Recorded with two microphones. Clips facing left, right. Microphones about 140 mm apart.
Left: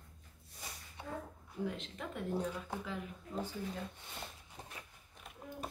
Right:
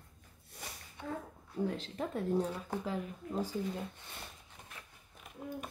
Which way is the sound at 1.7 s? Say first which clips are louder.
Right 6 dB; 35° right (ahead or behind).